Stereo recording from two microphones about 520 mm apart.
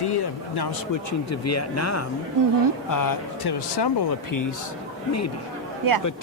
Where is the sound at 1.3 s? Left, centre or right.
Left.